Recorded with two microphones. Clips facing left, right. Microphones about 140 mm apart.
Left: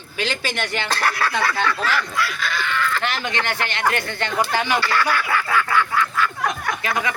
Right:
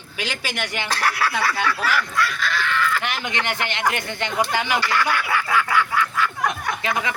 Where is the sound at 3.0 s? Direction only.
15° right (ahead or behind).